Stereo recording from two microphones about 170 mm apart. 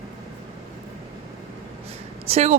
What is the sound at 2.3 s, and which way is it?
Speech, 40° right (ahead or behind).